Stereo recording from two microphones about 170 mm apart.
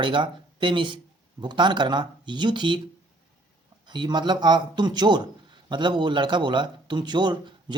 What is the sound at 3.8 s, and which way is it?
A man's voice, 25° right (ahead or behind).